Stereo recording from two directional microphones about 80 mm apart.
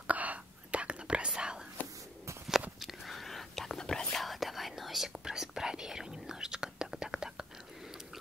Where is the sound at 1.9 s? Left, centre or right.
Right.